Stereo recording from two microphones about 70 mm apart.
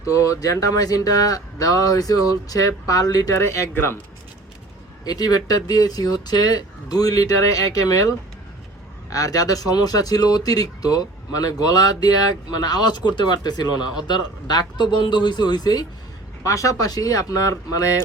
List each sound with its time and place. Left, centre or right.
0.0 s speech: left
3.3 s speech: left
5.0 s speech: left
9.1 s speech: left
16.4 s speech: left